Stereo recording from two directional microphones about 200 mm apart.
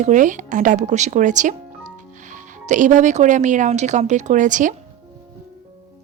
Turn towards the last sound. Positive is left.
turn(degrees=-40)  # may be behind; listen again after turning